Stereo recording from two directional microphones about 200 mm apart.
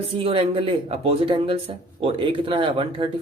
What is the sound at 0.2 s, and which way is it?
Speech, 25° right (ahead or behind).